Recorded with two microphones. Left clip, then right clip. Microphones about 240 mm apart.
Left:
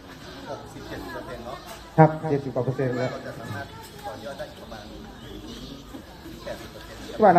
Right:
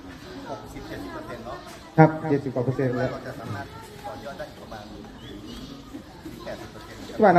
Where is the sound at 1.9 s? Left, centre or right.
Right.